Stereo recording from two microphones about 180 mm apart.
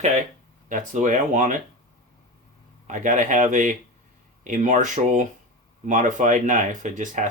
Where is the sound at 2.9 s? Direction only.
45° right (ahead or behind).